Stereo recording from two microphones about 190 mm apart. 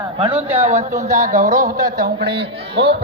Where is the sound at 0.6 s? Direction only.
35° right (ahead or behind).